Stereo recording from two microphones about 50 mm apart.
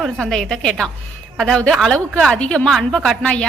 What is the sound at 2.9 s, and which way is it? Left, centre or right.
Speech, centre.